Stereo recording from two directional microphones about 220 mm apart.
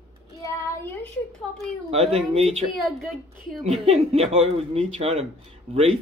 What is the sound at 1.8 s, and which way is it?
Speech, 25° right (ahead or behind).